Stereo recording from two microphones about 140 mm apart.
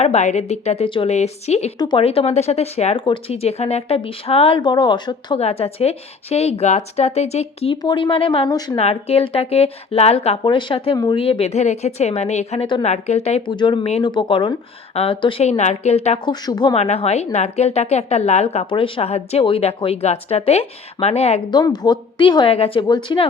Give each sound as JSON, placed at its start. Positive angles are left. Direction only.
{"t": 0.0, "sound": "speech", "side_deg": 55}
{"t": 5.4, "sound": "speech", "side_deg": 45}
{"t": 7.8, "sound": "a woman's voice", "side_deg": 30}
{"t": 8.4, "sound": "speech", "side_deg": 25}
{"t": 8.7, "sound": "speech", "side_deg": 45}
{"t": 10.4, "sound": "a woman's voice", "side_deg": 35}
{"t": 11.2, "sound": "speech", "side_deg": 45}
{"t": 13.4, "sound": "a woman's voice", "side_deg": 35}
{"t": 16.7, "sound": "speech", "side_deg": 50}
{"t": 18.7, "sound": "speech", "side_deg": 40}
{"t": 21.5, "sound": "a woman's voice", "side_deg": 30}